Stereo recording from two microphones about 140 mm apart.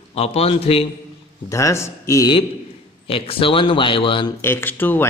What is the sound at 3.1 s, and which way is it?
A man's voice, 40° left (ahead or behind).